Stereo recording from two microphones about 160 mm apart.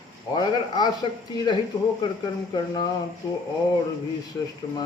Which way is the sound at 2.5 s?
25° left (ahead or behind).